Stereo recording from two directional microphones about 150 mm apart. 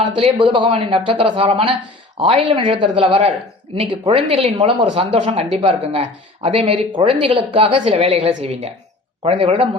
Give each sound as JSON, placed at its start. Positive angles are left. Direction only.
{"t": 0.0, "sound": "a woman's voice", "side_deg": -35}